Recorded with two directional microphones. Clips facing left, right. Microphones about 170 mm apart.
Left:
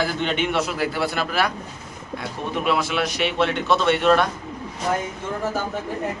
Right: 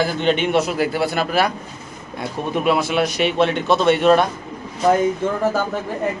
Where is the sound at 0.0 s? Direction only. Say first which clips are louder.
Right 5 dB; 30° right (ahead or behind).